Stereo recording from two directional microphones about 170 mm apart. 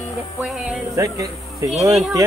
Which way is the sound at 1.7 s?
Centre (ahead or behind).